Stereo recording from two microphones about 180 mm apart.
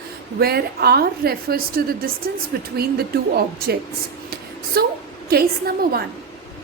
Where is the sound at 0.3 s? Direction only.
60° right (ahead or behind).